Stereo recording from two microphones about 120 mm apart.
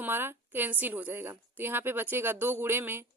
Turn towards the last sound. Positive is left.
turn(degrees=-20)  # may be behind; listen again after turning